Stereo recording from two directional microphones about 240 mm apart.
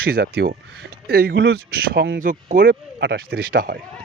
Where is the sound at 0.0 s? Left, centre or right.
Right.